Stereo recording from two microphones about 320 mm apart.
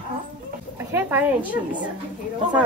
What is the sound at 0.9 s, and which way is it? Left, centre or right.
Speech, centre.